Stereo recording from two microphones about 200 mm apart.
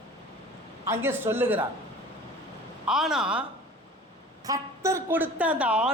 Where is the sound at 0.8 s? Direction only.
10° right (ahead or behind).